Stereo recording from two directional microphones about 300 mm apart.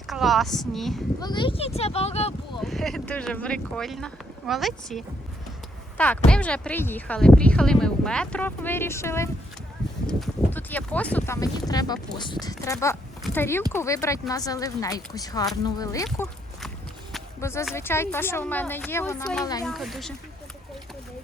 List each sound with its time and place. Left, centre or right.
0.1 s speech: centre
1.2 s speech: centre
2.6 s speech: centre
6.0 s speech: centre
16.6 s a sound: centre
17.7 s speech: centre